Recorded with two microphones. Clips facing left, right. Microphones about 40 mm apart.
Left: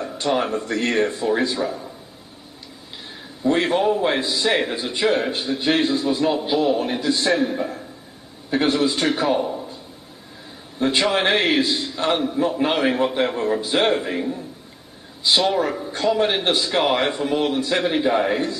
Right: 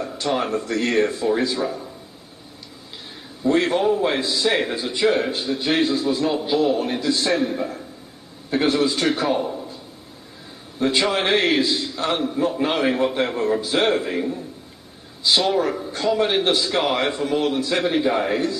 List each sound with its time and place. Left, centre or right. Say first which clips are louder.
0.0 s speech: left 1 dB; centre
3.4 s a man's voice: even; centre
10.8 s a man's voice: left 1 dB; centre